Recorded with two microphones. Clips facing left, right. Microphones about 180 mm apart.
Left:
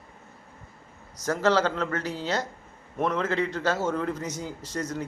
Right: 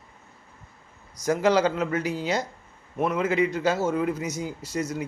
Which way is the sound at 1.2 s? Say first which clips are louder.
Right 2 dB; 10° right (ahead or behind).